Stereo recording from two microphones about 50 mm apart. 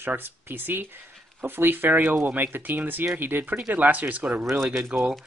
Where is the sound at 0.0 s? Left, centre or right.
Right.